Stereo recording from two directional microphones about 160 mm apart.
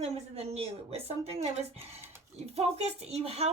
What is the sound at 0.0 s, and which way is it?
A woman's voice, 40° right (ahead or behind).